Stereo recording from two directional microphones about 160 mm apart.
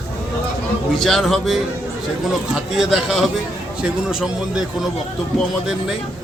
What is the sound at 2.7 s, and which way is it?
Speech, centre (ahead or behind).